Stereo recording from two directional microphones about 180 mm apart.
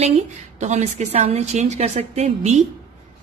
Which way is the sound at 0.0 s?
40° right (ahead or behind).